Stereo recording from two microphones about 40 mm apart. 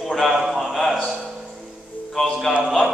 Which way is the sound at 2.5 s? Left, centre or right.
Centre.